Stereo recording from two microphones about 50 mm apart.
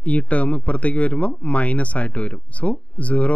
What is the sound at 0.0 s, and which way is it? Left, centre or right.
Speech, left.